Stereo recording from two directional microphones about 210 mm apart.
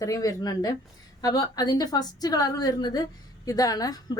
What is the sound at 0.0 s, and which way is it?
A woman's voice, 15° left (ahead or behind).